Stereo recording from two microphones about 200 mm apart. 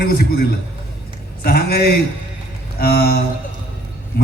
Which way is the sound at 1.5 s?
50° left (ahead or behind).